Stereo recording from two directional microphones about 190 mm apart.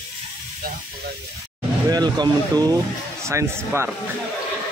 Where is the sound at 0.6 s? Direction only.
50° right (ahead or behind).